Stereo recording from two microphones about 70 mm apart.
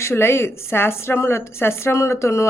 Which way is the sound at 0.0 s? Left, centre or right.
Left.